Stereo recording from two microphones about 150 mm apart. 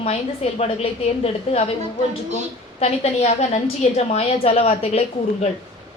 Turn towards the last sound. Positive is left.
turn(degrees=45)  # may be behind; listen again after turning